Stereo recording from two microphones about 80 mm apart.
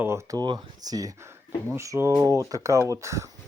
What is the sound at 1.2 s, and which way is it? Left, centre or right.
Speech, right.